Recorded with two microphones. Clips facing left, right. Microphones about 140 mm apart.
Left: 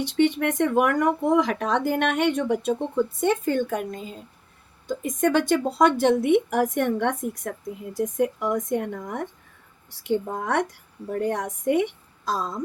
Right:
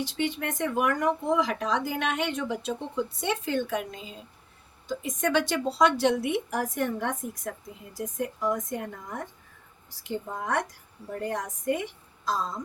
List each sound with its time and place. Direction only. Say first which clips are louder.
0.0 s a woman's voice: left 8 dB; 60° left (ahead or behind)
8.7 s a woman's voice: left 7 dB; 65° left (ahead or behind)